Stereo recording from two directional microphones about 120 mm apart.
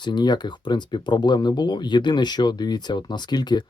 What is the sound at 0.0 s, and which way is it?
Speech, 35° left (ahead or behind).